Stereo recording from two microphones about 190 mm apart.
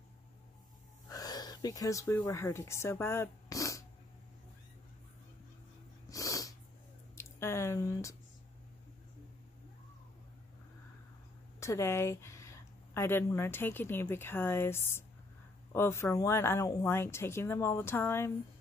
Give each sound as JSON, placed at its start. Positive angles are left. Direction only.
{"t": 1.0, "sound": "a sound", "side_deg": 20}
{"t": 2.1, "sound": "speech", "side_deg": 15}
{"t": 6.0, "sound": "cat", "side_deg": 15}
{"t": 7.2, "sound": "squish", "side_deg": 15}
{"t": 11.6, "sound": "speech", "side_deg": 15}